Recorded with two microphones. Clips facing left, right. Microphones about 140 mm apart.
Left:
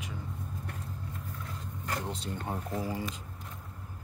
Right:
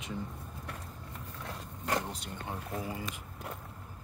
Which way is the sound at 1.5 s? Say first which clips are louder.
Right 4 dB; 90° right.